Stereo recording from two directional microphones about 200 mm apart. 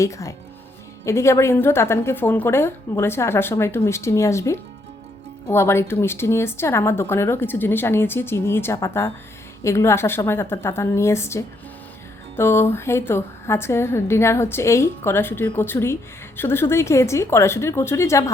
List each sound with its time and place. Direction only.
0.0 s speech: 15° left (ahead or behind)